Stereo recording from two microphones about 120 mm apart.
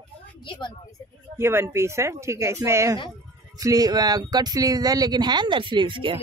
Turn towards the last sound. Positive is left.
turn(degrees=-45)  # may be behind; listen again after turning